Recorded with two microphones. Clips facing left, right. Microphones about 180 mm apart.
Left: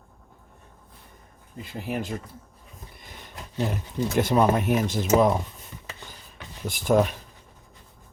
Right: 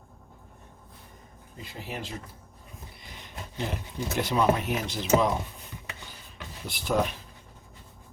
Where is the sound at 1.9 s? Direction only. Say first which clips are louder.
Left 8 dB; 50° left (ahead or behind).